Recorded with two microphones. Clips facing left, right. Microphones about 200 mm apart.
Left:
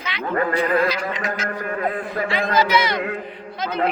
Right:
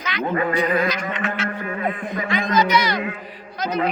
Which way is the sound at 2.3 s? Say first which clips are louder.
Even; 30° left (ahead or behind).